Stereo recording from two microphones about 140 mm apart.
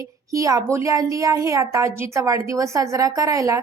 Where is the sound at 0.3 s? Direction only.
25° right (ahead or behind).